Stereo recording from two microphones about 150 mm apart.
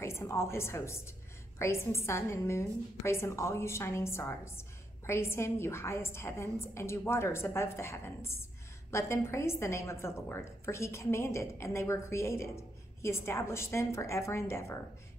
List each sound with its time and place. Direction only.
0.0 s a woman's voice: 20° left (ahead or behind)